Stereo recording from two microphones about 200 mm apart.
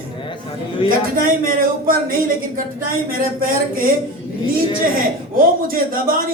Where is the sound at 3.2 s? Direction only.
45° right (ahead or behind).